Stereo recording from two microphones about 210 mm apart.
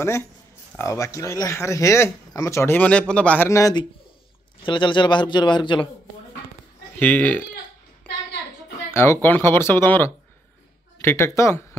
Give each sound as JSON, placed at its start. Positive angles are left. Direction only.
{"t": 0.0, "sound": "a man's voice", "side_deg": 10}
{"t": 7.0, "sound": "speech", "side_deg": 5}
{"t": 8.9, "sound": "speech", "side_deg": 10}